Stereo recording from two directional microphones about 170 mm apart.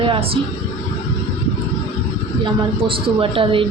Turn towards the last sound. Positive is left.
turn(degrees=-30)  # may be behind; listen again after turning